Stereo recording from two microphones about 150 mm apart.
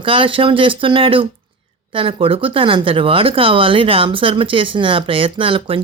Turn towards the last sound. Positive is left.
turn(degrees=-35)  # may be behind; listen again after turning